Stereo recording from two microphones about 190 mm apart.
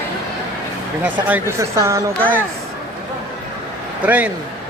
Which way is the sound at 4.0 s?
10° right (ahead or behind).